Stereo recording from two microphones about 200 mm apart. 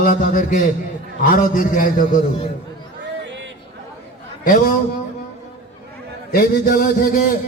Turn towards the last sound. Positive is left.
turn(degrees=50)  # may be behind; listen again after turning